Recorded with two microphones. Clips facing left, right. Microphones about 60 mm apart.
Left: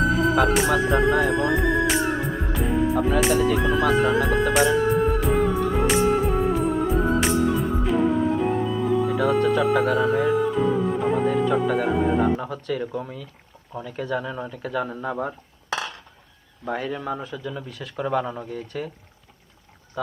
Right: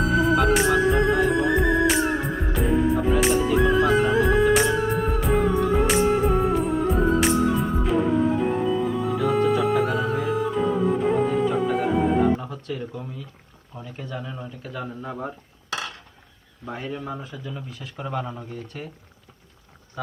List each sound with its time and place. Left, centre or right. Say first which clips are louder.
0.0 s music: even; centre
12.4 s a sound: left 4 dB; left
13.7 s speech: left 7 dB; left
16.6 s speech: left 4 dB; left